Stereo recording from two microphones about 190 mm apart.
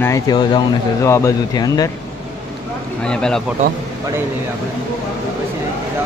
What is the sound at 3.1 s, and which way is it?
Speech, 5° left (ahead or behind).